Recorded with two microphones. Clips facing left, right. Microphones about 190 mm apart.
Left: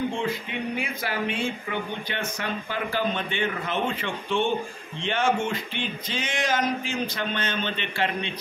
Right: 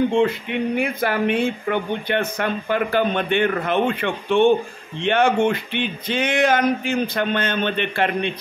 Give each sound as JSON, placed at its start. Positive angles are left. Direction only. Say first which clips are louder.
{"t": 0.1, "sound": "speech", "louder": "right 9 dB", "side_deg": -65}